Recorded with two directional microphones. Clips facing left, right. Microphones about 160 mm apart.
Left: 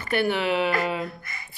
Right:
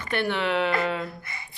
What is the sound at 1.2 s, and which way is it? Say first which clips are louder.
Speech: even; 25° right (ahead or behind).